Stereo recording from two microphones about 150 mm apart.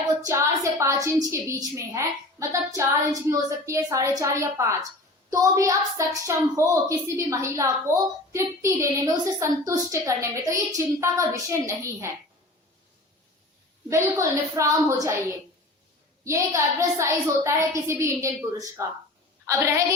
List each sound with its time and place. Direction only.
0.2 s a woman's voice: 20° right (ahead or behind)
13.9 s a woman's voice: 20° right (ahead or behind)
16.2 s a woman's voice: 20° right (ahead or behind)